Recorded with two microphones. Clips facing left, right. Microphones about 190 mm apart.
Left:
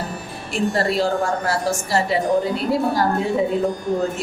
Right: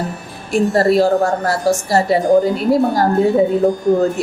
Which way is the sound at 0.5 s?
40° right (ahead or behind).